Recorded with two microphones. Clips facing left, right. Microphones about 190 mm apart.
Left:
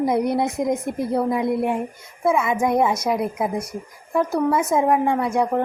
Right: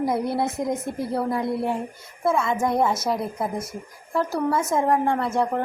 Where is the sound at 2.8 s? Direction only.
Centre (ahead or behind).